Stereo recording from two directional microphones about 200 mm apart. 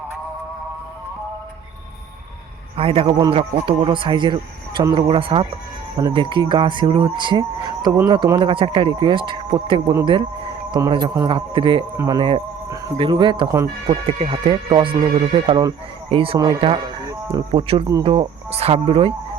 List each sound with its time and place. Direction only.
2.7 s speech: 30° right (ahead or behind)
17.1 s music: 15° right (ahead or behind)
17.5 s speech: 25° right (ahead or behind)